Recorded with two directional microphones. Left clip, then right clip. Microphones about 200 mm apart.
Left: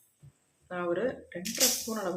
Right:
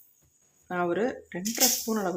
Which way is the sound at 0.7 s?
45° right (ahead or behind).